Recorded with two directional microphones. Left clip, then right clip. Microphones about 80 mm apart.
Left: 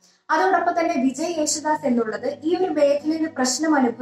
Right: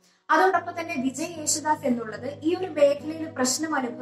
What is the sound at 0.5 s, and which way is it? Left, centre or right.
A woman's voice, left.